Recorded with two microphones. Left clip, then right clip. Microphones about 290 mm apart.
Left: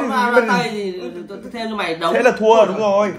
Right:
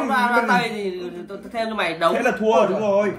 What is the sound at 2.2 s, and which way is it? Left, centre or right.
Speech, left.